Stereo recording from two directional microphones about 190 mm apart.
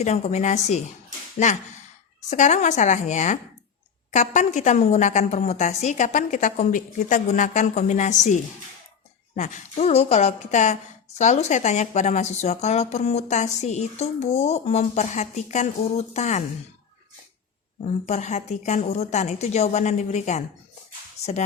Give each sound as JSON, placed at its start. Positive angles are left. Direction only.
{"t": 0.0, "sound": "speech", "side_deg": 35}
{"t": 2.3, "sound": "speech", "side_deg": 40}
{"t": 9.3, "sound": "speech", "side_deg": 40}
{"t": 17.8, "sound": "speech", "side_deg": 40}